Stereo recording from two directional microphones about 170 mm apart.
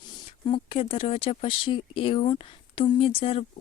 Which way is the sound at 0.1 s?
30° left (ahead or behind).